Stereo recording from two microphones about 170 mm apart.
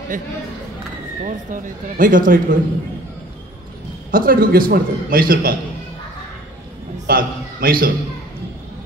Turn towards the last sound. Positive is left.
turn(degrees=-60)  # may be behind; listen again after turning